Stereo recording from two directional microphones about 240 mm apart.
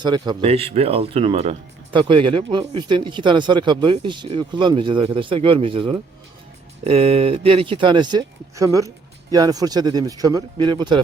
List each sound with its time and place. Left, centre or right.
0.0 s speech: centre